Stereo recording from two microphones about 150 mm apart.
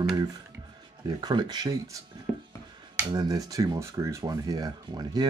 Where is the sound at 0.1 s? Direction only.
25° right (ahead or behind).